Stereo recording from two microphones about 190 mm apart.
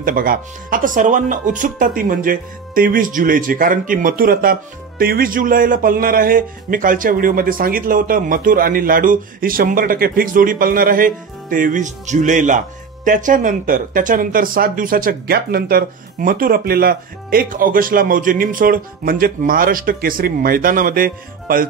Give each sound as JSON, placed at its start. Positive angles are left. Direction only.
{"t": 0.0, "sound": "speech", "side_deg": -50}